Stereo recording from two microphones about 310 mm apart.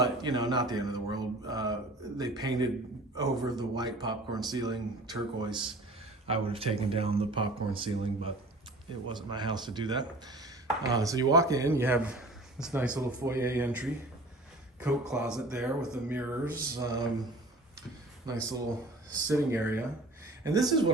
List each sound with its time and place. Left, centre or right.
0.0 s a man's voice: centre
18.3 s a man's voice: centre